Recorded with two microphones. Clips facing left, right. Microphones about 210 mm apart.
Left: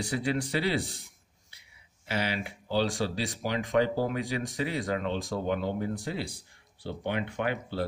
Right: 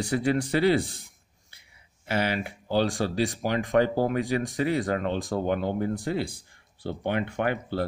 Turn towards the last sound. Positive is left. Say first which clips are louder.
# right 4 dB
turn(degrees=-50)  # may be behind; listen again after turning